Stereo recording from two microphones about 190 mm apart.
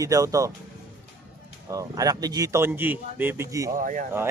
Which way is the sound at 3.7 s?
45° right (ahead or behind).